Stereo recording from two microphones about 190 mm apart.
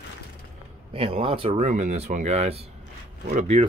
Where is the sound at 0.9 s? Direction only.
30° right (ahead or behind).